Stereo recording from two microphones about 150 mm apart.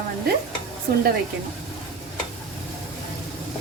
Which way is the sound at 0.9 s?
80° right.